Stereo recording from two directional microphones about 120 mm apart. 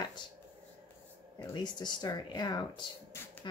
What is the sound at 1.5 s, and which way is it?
Speech, 35° left (ahead or behind).